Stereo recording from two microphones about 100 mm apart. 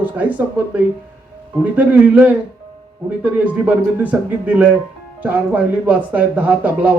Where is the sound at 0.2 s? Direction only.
15° right (ahead or behind).